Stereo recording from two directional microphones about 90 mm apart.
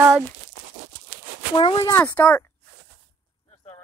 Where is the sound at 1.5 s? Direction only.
70° left (ahead or behind).